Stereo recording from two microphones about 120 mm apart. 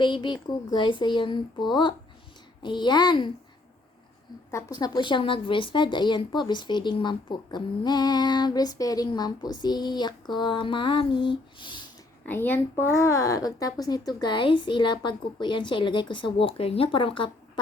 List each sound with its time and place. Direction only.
0.0 s speech: 40° left (ahead or behind)
4.5 s speech: 30° left (ahead or behind)
12.2 s speech: 15° left (ahead or behind); by 17.6 s 45° left (ahead or behind)